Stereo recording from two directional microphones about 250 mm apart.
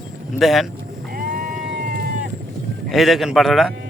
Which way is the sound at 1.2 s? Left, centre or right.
Right.